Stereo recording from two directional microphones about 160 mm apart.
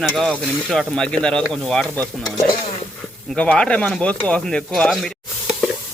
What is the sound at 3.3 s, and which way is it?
Speech, 5° left (ahead or behind).